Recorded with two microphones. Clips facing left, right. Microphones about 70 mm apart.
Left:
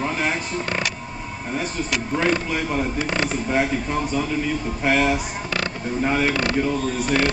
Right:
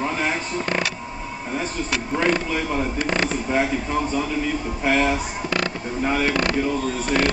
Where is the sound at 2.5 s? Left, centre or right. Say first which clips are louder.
Even; centre.